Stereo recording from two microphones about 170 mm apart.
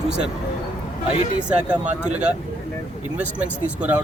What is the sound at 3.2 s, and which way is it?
Speech, 10° right (ahead or behind).